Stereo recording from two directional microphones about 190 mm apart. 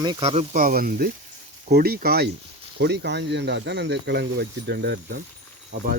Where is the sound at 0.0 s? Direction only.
20° right (ahead or behind).